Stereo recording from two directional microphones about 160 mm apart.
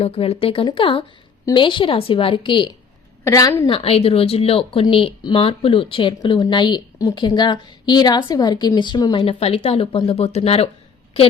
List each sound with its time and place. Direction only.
0.0 s speech: 40° left (ahead or behind)
3.2 s a woman's voice: 20° left (ahead or behind)
3.7 s speech: 35° left (ahead or behind)
9.2 s speech: 40° left (ahead or behind)